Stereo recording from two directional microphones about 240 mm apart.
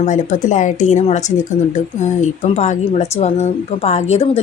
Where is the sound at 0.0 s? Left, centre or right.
Left.